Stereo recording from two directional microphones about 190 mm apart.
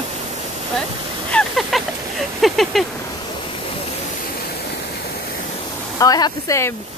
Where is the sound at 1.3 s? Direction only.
Centre (ahead or behind).